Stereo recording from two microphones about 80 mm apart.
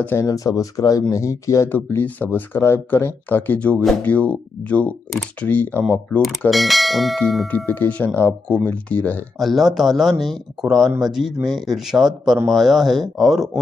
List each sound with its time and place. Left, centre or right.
0.1 s speech: left
1.7 s speech: left
6.5 s speech: centre
7.5 s speech: left
9.4 s speech: centre